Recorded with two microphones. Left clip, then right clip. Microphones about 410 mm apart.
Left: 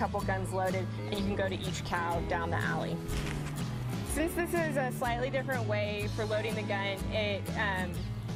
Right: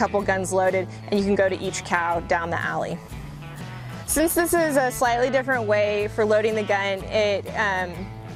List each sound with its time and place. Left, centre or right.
0.0 s speech: right
4.2 s speech: right